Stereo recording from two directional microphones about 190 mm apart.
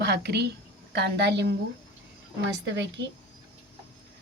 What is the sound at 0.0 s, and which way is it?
A woman's voice, 60° right (ahead or behind).